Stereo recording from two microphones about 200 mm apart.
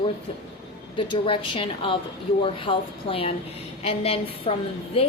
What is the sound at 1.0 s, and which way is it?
A woman's voice, 25° left (ahead or behind).